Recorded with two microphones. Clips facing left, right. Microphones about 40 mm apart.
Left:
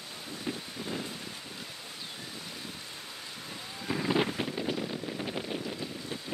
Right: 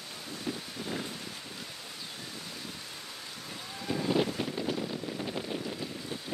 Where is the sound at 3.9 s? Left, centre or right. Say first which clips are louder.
Even; left.